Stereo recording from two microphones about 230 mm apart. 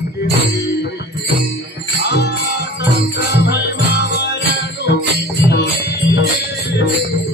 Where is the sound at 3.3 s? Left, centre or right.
Left.